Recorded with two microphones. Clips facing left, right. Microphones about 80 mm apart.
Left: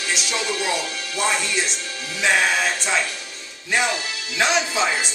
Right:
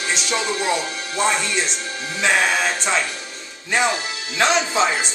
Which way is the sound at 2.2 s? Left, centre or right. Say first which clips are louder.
Right 1 dB; centre.